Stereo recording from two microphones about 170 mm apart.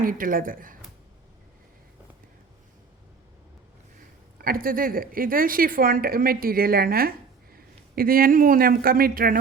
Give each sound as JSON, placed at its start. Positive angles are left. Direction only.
{"t": 0.0, "sound": "speech", "side_deg": -55}
{"t": 4.4, "sound": "speech", "side_deg": -60}